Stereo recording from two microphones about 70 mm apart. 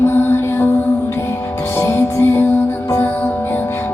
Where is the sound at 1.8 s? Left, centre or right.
Left.